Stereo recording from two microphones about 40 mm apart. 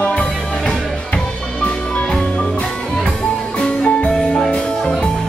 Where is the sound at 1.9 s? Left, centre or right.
Left.